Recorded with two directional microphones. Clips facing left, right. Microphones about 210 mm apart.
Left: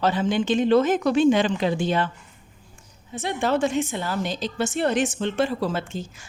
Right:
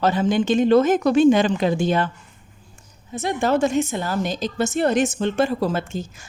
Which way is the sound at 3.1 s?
45° right (ahead or behind).